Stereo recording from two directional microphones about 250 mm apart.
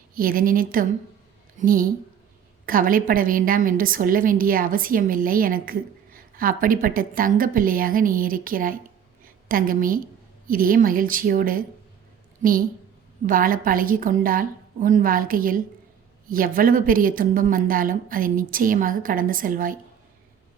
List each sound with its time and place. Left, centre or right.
0.1 s a woman's voice: right